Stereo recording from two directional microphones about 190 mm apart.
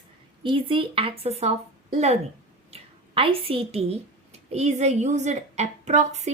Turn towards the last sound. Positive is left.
turn(degrees=-35)  # may be behind; listen again after turning